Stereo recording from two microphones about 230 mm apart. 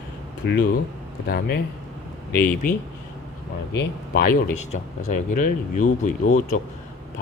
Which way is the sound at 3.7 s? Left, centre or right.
Left.